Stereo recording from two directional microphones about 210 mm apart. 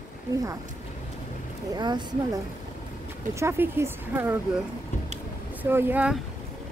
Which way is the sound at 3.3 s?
10° right (ahead or behind).